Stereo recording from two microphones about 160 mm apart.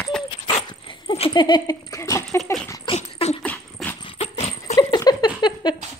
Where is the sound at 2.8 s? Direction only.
40° left (ahead or behind).